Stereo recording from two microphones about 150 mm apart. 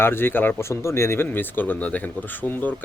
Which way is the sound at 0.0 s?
15° left (ahead or behind).